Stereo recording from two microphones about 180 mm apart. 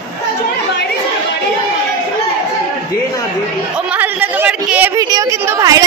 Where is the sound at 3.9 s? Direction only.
10° right (ahead or behind).